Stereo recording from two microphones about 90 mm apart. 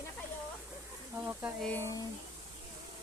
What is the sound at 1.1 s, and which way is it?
Speech, 15° right (ahead or behind).